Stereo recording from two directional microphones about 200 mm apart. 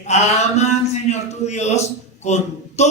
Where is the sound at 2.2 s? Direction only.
35° left (ahead or behind).